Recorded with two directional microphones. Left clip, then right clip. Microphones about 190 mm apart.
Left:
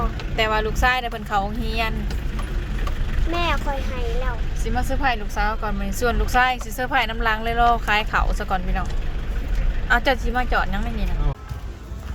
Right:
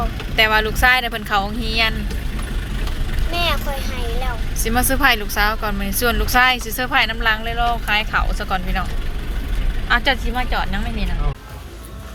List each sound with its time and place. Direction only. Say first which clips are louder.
0.3 s a woman's voice: right 6 dB; 5° left (ahead or behind)
3.3 s speech: right 3 dB; 45° left (ahead or behind)
4.6 s a woman's voice: right 7 dB; 5° right (ahead or behind); by 8.8 s 20° left (ahead or behind)
9.9 s speech: right 2 dB; 20° left (ahead or behind)